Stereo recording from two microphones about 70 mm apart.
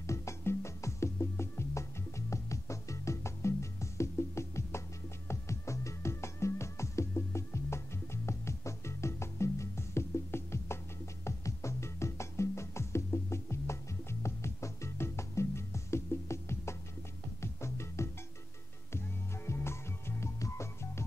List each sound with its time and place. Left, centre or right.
0.0 s music: left